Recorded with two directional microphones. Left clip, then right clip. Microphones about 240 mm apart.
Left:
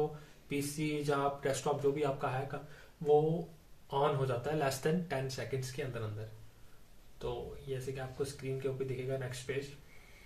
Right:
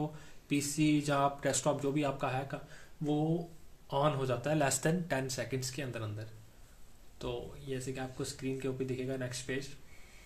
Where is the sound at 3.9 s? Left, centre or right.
Right.